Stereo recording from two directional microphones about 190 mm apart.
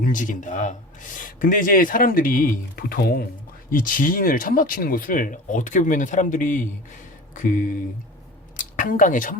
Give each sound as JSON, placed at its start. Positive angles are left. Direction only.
{"t": 0.0, "sound": "speech", "side_deg": 45}
{"t": 8.5, "sound": "speech", "side_deg": 45}